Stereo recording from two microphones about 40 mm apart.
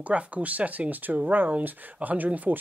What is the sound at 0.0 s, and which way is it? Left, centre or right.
Speech, right.